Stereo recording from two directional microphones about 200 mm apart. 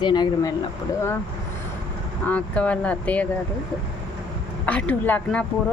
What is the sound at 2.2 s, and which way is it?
Speech, 5° left (ahead or behind).